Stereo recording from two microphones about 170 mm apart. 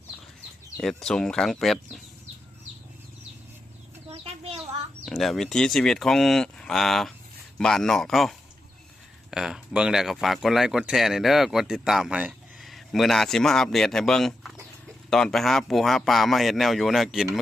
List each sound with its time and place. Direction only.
0.8 s speech: centre (ahead or behind)
4.1 s a sound: 35° right (ahead or behind)
5.0 s speech: centre (ahead or behind)